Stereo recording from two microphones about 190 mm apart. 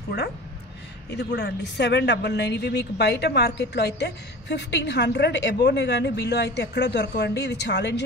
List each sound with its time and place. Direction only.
1.1 s a woman's voice: 60° left (ahead or behind)